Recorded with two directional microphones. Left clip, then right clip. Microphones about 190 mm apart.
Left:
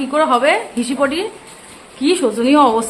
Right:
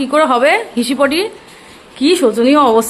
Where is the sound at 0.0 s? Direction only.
20° right (ahead or behind).